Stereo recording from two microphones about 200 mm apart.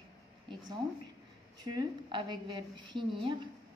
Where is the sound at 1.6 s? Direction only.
20° right (ahead or behind).